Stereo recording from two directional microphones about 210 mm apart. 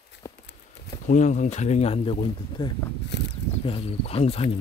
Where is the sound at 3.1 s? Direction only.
55° left (ahead or behind).